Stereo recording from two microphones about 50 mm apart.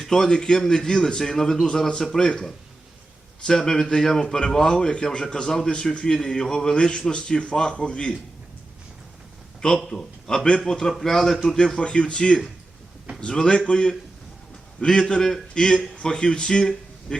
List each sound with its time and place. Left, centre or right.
0.0 s a man's voice: centre
9.6 s a man's voice: centre